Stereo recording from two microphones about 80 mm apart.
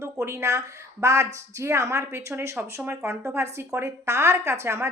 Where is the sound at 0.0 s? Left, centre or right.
Right.